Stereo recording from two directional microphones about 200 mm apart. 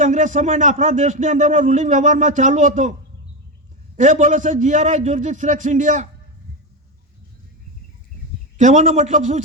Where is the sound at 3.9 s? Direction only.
35° right (ahead or behind).